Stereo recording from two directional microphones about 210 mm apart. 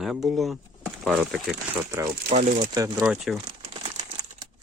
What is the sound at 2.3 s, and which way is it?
Speech, 35° right (ahead or behind).